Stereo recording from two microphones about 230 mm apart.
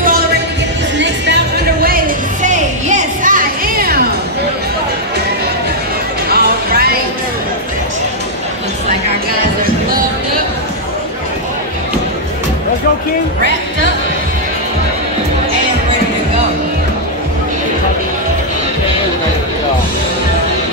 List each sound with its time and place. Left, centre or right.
0.9 s music: right
2.4 s music: right
6.2 s music: right